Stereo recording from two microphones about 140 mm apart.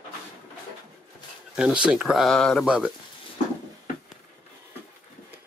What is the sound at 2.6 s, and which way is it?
Speech, 5° right (ahead or behind).